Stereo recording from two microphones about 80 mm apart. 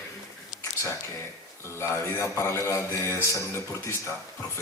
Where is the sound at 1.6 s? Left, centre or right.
Left.